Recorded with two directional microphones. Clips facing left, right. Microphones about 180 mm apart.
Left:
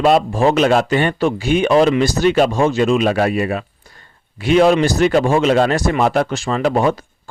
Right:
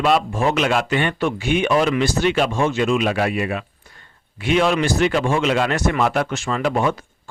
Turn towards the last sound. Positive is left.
turn(degrees=35)  # may be behind; listen again after turning